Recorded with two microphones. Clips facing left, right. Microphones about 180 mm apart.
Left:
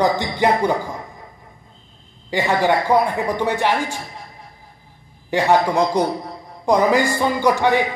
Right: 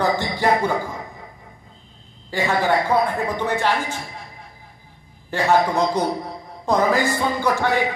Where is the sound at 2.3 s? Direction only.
15° left (ahead or behind).